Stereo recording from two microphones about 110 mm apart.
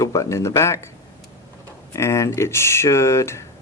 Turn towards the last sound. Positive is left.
turn(degrees=25)  # may be behind; listen again after turning